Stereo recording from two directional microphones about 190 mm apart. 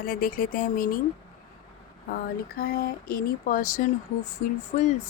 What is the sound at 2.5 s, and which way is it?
Speech, 55° left (ahead or behind).